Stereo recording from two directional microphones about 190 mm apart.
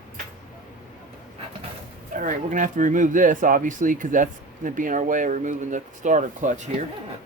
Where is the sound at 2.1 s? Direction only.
45° right (ahead or behind).